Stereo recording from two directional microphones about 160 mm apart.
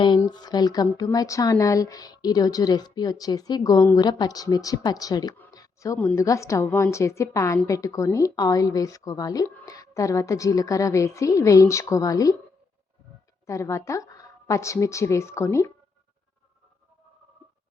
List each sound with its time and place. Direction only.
0.2 s speech: 25° left (ahead or behind)
5.5 s a sound: 20° left (ahead or behind)
6.0 s a woman's voice: 10° left (ahead or behind)
13.5 s speech: 20° left (ahead or behind)